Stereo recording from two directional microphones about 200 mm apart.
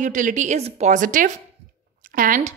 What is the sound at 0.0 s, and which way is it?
A woman's voice, 40° right (ahead or behind).